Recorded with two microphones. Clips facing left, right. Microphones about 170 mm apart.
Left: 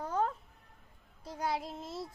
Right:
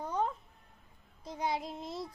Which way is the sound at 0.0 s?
5° left (ahead or behind).